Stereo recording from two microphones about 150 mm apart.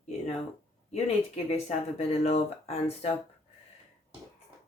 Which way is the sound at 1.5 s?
45° left (ahead or behind).